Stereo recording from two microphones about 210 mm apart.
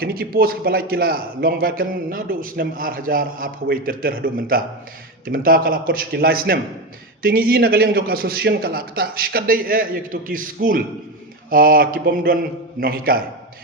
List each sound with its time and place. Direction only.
0.0 s a man's voice: 45° right (ahead or behind)